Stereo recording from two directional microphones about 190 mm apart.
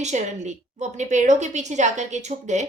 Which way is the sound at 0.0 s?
40° right (ahead or behind).